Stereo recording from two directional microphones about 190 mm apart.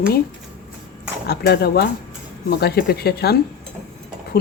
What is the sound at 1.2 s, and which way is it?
Speech, 60° left (ahead or behind).